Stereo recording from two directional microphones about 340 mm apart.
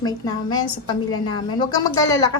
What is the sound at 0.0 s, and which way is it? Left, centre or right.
A woman's voice, centre.